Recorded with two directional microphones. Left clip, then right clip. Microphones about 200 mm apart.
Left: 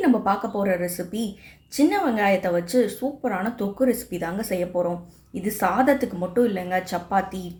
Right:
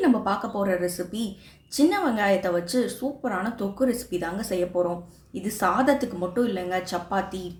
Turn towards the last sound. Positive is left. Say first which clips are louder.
# left 3 dB
turn(degrees=15)  # may be behind; listen again after turning